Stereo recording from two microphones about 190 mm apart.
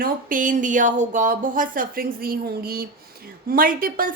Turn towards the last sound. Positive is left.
turn(degrees=-50)  # may be behind; listen again after turning